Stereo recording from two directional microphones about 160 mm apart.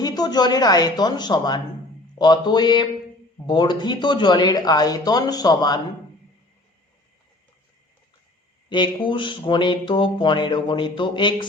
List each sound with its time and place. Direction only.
0.0 s speech: 25° left (ahead or behind)
8.7 s speech: 30° left (ahead or behind)